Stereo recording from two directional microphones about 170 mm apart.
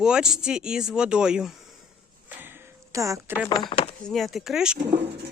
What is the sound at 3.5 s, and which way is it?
Speech, 30° left (ahead or behind).